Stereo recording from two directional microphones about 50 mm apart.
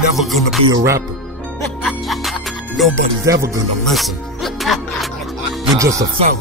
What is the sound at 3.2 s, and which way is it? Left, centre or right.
Music, right.